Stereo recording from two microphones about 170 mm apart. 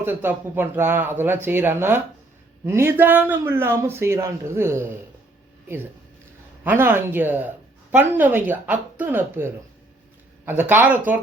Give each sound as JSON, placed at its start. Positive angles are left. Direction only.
{"t": 0.0, "sound": "a woman's voice", "side_deg": -15}
{"t": 6.7, "sound": "a woman's voice", "side_deg": -15}